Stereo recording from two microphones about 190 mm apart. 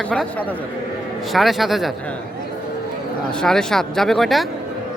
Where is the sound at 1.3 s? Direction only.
Centre (ahead or behind).